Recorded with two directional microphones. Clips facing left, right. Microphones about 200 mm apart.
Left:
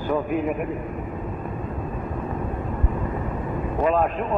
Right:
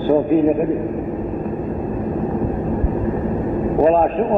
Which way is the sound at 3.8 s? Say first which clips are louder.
Right 7 dB; 35° right (ahead or behind).